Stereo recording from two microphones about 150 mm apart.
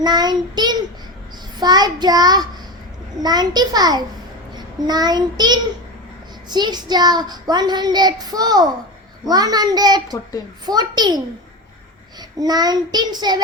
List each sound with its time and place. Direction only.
0.0 s a child's voice: 25° right (ahead or behind)
4.5 s child singing: 25° right (ahead or behind)
6.5 s a child's voice: 30° right (ahead or behind)
12.4 s a child's voice: 25° right (ahead or behind)